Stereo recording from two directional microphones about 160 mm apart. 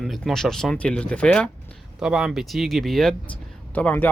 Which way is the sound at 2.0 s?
5° right (ahead or behind).